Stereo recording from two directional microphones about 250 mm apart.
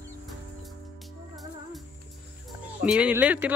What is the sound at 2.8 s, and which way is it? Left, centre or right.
Speech, centre.